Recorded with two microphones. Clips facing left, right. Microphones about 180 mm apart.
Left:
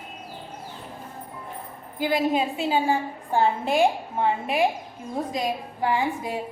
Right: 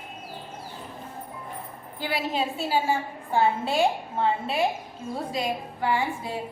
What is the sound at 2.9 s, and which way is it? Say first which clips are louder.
A woman's voice: left 2 dB; 15° left (ahead or behind).